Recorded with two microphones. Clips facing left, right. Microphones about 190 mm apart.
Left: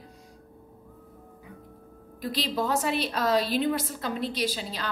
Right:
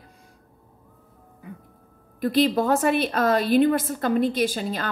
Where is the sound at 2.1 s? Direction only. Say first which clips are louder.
Right 9 dB; 55° right (ahead or behind).